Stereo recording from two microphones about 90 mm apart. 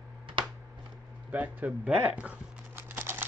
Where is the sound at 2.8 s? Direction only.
25° right (ahead or behind).